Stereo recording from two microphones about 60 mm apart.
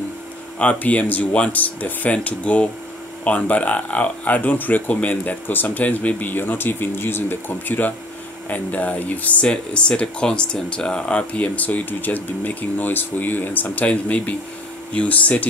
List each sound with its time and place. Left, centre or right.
0.6 s speech: left